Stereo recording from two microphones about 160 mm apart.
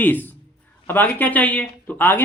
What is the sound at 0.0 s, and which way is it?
Speech, 10° left (ahead or behind).